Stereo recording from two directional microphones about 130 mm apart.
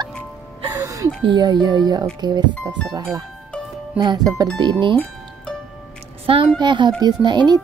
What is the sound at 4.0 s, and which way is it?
Speech, 30° right (ahead or behind).